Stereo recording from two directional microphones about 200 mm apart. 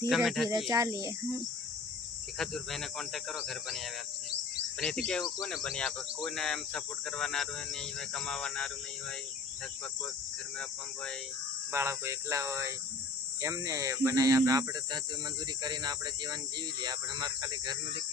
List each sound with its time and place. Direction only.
0.1 s speech: centre (ahead or behind)
0.7 s speech: 15° right (ahead or behind)
2.4 s speech: centre (ahead or behind)
5.0 s speech: 5° left (ahead or behind)
11.7 s speech: 15° right (ahead or behind)